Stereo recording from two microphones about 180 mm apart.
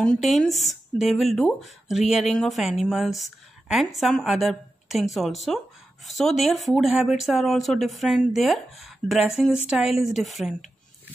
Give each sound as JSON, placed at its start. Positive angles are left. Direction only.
{"t": 0.0, "sound": "speech", "side_deg": 0}